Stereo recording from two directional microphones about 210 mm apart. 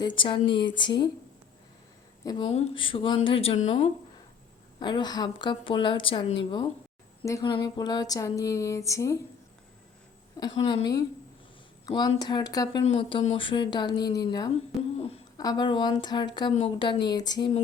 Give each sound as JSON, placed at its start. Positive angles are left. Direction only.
{"t": 0.2, "sound": "a woman's voice", "side_deg": 25}
{"t": 2.2, "sound": "a woman's voice", "side_deg": 25}
{"t": 4.8, "sound": "a woman's voice", "side_deg": 20}
{"t": 7.2, "sound": "a sound", "side_deg": 20}
{"t": 10.4, "sound": "a woman's voice", "side_deg": 20}
{"t": 14.9, "sound": "hoot", "side_deg": 30}
{"t": 15.4, "sound": "a woman's voice", "side_deg": 20}